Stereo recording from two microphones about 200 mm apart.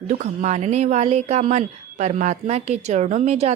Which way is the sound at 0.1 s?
35° right (ahead or behind).